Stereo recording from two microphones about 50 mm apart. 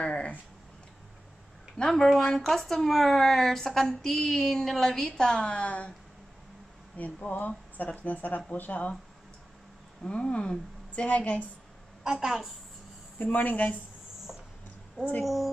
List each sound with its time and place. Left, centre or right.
0.0 s a sound: left
1.8 s speech: centre
7.0 s speech: left
10.0 s a woman's voice: left
12.0 s a woman's voice: centre
13.2 s speech: left
15.2 s a woman's voice: centre